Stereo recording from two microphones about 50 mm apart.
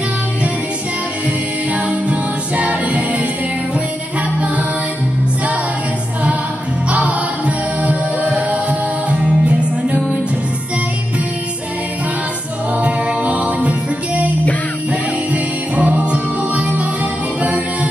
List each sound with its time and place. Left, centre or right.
1.7 s music: right
6.9 s music: right
12.7 s music: right